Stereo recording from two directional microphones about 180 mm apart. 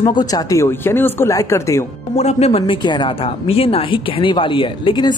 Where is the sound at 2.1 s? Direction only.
35° left (ahead or behind).